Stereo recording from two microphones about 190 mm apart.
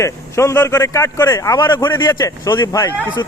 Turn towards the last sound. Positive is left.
turn(degrees=20)  # may be behind; listen again after turning